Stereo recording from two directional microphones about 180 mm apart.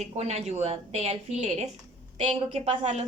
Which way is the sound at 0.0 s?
35° right (ahead or behind).